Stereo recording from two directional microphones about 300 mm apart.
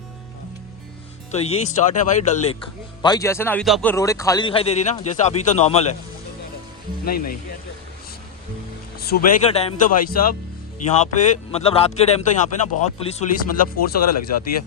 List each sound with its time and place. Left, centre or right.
1.3 s speech: left
3.0 s a man's voice: centre
7.0 s speech: left
9.0 s speech: left
14.0 s speech: left